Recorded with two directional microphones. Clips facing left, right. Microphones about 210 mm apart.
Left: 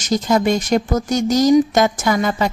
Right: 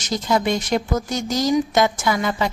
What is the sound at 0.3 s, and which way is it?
A woman's voice, 45° left (ahead or behind).